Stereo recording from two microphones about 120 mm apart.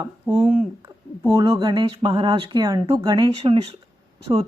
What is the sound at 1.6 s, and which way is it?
A woman's voice, 40° right (ahead or behind).